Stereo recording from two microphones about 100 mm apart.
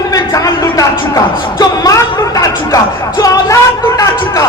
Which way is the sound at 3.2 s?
35° left (ahead or behind).